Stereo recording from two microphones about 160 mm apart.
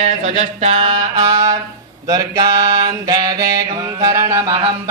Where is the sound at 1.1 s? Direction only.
20° right (ahead or behind).